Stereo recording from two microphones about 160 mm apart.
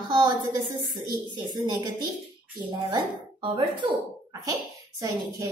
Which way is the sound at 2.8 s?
30° right (ahead or behind).